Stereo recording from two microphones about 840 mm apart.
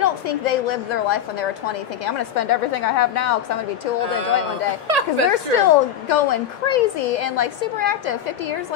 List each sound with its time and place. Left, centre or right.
0.0 s a woman's voice: left
4.8 s a woman's voice: right
5.3 s a woman's voice: left